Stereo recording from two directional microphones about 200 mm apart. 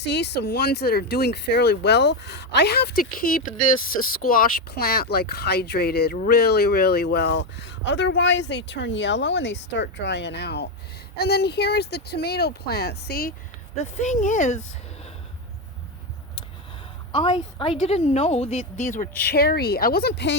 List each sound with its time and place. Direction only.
0.0 s speech: 60° left (ahead or behind)
13.7 s a woman's voice: 35° left (ahead or behind)
17.1 s a woman's voice: 30° left (ahead or behind)
19.2 s speech: 50° left (ahead or behind)